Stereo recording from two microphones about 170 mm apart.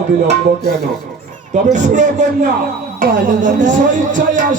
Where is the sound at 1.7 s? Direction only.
45° right (ahead or behind).